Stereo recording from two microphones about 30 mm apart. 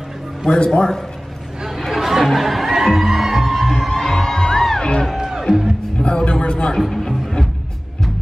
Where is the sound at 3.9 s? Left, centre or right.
Centre.